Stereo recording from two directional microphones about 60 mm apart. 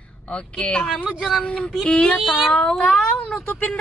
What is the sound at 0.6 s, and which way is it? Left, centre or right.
Music, centre.